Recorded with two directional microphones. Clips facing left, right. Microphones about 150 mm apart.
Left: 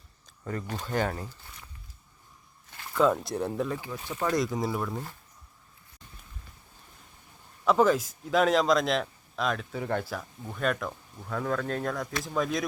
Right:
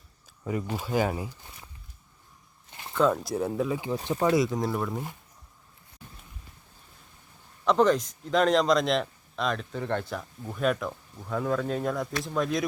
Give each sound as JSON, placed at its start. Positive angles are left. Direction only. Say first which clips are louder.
{"t": 0.4, "sound": "speech", "louder": "right 4 dB", "side_deg": -10}
{"t": 2.6, "sound": "a sound", "louder": "right 1 dB", "side_deg": -20}
{"t": 2.9, "sound": "a man's voice", "louder": "even", "side_deg": 0}
{"t": 3.9, "sound": "speech", "louder": "right 8 dB", "side_deg": -35}
{"t": 4.2, "sound": "a man's voice", "louder": "right 3 dB", "side_deg": -5}
{"t": 7.6, "sound": "a man's voice", "louder": "right 1 dB", "side_deg": 5}